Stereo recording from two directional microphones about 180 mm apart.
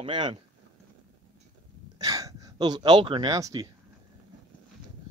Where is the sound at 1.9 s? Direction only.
20° right (ahead or behind).